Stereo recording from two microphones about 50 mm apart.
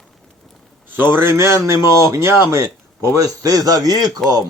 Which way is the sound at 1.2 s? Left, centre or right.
Right.